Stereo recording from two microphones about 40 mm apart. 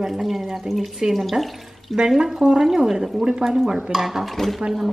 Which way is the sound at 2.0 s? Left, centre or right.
Centre.